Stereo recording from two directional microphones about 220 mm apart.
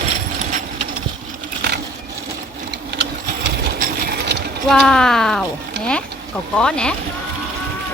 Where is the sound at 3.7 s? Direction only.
40° right (ahead or behind).